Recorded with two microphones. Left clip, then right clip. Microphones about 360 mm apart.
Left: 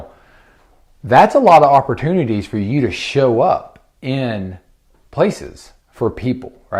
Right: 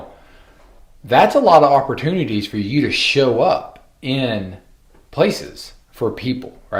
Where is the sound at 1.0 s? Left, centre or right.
Left.